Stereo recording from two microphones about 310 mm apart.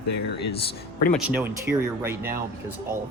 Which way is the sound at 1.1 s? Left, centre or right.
Centre.